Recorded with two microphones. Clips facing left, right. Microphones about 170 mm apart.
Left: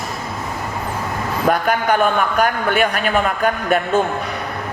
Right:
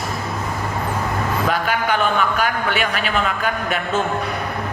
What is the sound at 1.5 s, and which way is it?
A man's voice, 45° left (ahead or behind).